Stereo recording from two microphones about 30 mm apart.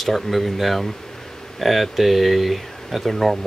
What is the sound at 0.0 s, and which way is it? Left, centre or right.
Speech, centre.